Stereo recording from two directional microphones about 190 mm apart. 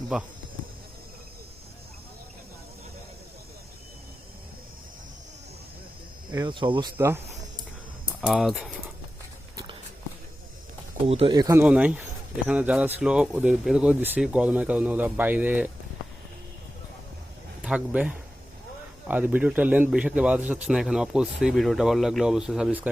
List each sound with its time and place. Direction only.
0.1 s a man's voice: 5° right (ahead or behind)
6.3 s speech: 25° right (ahead or behind)
6.9 s speech: 10° right (ahead or behind)
8.2 s a man's voice: 5° right (ahead or behind)
11.0 s speech: 30° right (ahead or behind)
11.6 s speech: 5° right (ahead or behind)
17.6 s a man's voice: 5° right (ahead or behind)